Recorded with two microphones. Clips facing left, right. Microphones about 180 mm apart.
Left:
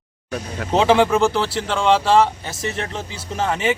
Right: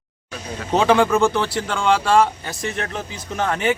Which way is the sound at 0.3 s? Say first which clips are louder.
Left 4 dB; 55° left (ahead or behind).